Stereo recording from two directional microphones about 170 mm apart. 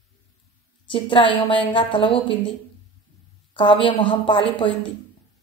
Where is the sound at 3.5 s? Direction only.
30° left (ahead or behind).